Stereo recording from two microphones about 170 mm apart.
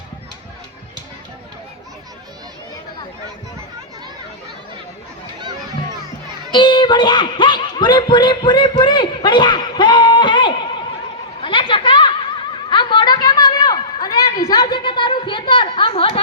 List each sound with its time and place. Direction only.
6.5 s speech: 25° left (ahead or behind)
11.4 s chatter: 30° left (ahead or behind)
12.6 s a sound: 30° left (ahead or behind)